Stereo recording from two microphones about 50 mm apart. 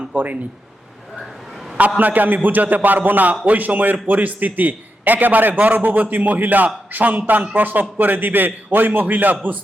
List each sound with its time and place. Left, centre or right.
0.1 s a man's voice: right
2.0 s a man's voice: right